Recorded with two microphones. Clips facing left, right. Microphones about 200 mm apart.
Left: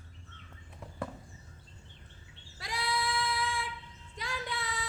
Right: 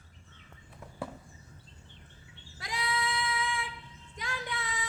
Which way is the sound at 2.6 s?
Centre (ahead or behind).